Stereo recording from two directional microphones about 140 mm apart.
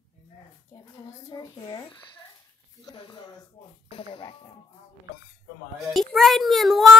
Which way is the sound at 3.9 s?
40° left (ahead or behind).